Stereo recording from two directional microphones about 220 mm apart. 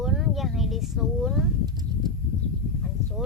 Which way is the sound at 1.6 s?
20° right (ahead or behind).